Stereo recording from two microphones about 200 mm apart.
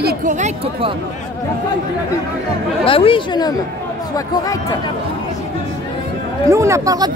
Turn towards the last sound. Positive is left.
turn(degrees=-15)  # may be behind; listen again after turning